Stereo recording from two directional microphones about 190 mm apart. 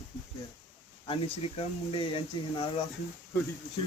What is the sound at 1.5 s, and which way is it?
Speech, 30° left (ahead or behind).